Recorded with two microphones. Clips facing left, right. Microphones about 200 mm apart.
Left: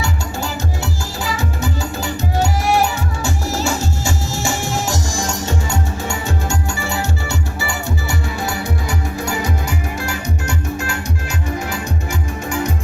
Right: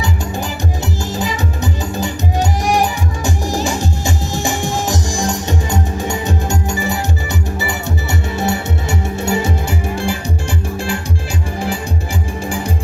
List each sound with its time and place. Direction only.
1.2 s music: 20° right (ahead or behind)